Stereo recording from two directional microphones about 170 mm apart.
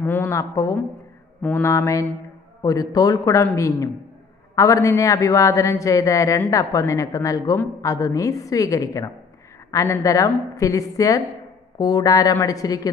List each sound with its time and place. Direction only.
0.0 s a woman's voice: 10° left (ahead or behind)